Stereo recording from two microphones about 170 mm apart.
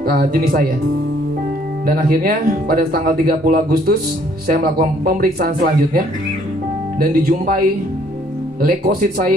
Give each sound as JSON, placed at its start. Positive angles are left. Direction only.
{"t": 0.0, "sound": "speech", "side_deg": -60}
{"t": 1.9, "sound": "speech", "side_deg": -60}